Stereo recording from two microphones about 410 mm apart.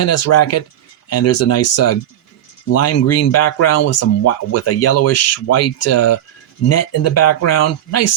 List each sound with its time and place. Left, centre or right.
0.0 s speech: left